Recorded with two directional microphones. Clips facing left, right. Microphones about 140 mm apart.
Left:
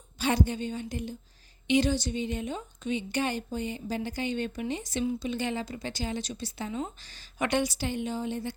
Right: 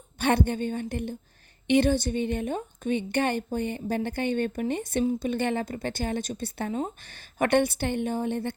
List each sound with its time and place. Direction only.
0.2 s a woman's voice: 60° right (ahead or behind)